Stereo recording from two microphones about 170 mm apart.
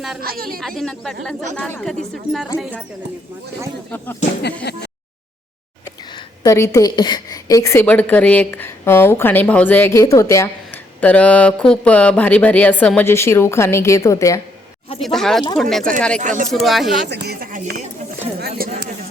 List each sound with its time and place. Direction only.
0.2 s a woman's voice: 60° right (ahead or behind)
0.8 s speech: 5° left (ahead or behind)
3.9 s a woman's voice: 10° left (ahead or behind)
4.7 s a sound: 80° left
6.4 s a woman's voice: 20° left (ahead or behind)
15.0 s speech: centre (ahead or behind)
16.2 s speech: 45° right (ahead or behind)
16.5 s speech: centre (ahead or behind)
17.1 s speech: 70° right (ahead or behind)
17.5 s speech: 50° right (ahead or behind)
18.3 s a sound: 65° right (ahead or behind)